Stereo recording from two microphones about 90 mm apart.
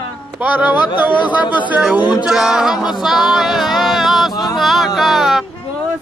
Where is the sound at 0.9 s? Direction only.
60° left (ahead or behind).